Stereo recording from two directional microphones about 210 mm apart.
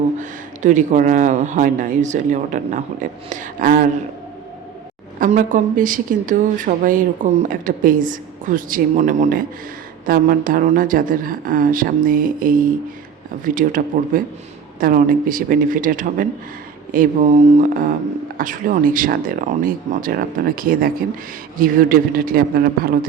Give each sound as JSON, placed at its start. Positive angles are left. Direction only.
{"t": 0.2, "sound": "speech", "side_deg": -35}
{"t": 5.2, "sound": "a man's voice", "side_deg": -40}